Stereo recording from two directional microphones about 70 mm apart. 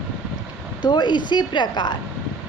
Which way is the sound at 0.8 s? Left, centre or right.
Left.